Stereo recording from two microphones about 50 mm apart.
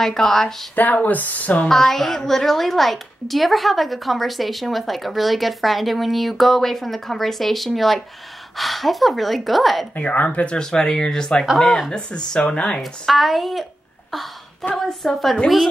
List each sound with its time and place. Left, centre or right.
0.0 s a child's voice: centre
0.7 s speech: left
1.7 s a child's voice: centre
9.9 s speech: left
10.6 s a child's voice: centre
11.9 s speech: centre
12.8 s a child's voice: centre